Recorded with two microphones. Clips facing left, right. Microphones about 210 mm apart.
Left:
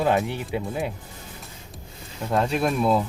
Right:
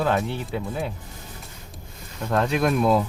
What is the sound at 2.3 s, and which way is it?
Speech, 10° left (ahead or behind).